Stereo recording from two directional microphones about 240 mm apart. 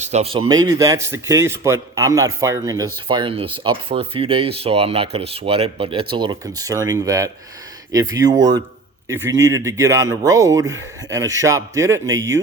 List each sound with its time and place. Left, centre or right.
0.0 s speech: right